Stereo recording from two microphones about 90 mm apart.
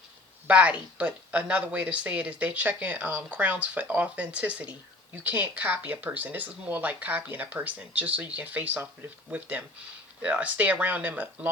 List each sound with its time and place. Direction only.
0.4 s speech: 15° right (ahead or behind)